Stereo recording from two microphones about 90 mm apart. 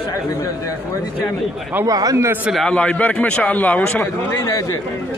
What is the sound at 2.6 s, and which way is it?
A man's voice, 10° left (ahead or behind).